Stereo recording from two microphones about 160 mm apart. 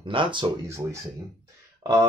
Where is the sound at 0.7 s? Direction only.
20° right (ahead or behind).